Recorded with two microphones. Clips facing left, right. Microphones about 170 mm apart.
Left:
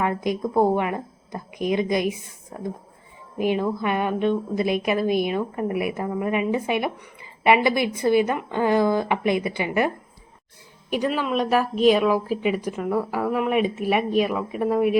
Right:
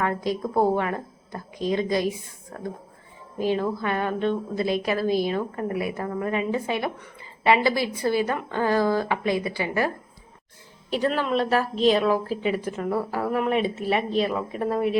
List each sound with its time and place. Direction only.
0.0 s a woman's voice: 15° left (ahead or behind)